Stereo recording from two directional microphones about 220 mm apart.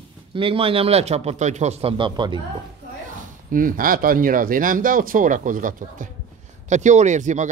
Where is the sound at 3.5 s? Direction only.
40° right (ahead or behind).